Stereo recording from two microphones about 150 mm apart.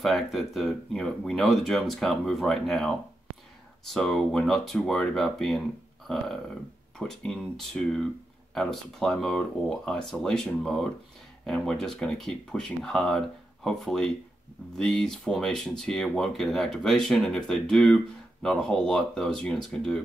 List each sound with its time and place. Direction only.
0.0 s speech: centre (ahead or behind)
6.0 s a sound: centre (ahead or behind)
7.0 s speech: 5° left (ahead or behind)